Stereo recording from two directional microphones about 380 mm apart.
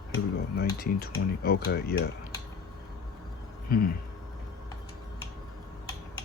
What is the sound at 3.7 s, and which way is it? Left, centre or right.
Speech, left.